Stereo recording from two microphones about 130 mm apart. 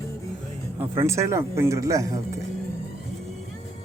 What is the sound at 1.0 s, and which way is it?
Speech, 20° right (ahead or behind).